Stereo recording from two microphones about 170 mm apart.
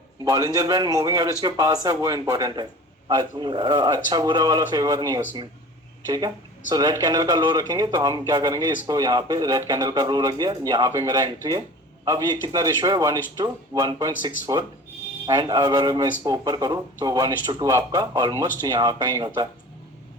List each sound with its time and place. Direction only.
0.3 s speech: 20° right (ahead or behind)